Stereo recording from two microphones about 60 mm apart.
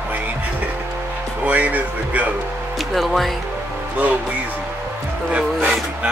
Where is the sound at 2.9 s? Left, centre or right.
Centre.